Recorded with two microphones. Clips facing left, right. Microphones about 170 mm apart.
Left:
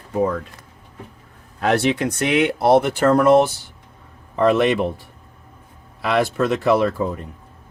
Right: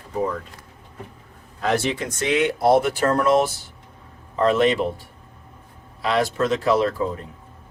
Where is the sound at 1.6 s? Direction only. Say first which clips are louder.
Left 4 dB; 65° left (ahead or behind).